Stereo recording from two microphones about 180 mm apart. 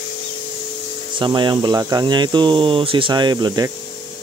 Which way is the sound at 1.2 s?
25° right (ahead or behind).